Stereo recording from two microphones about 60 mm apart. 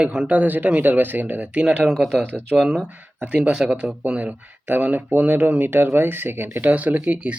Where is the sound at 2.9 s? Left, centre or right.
Right.